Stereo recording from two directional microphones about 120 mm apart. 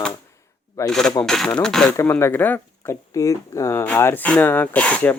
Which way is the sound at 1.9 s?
20° left (ahead or behind).